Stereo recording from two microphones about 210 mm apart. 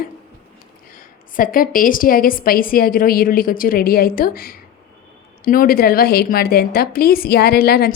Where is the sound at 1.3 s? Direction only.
40° left (ahead or behind).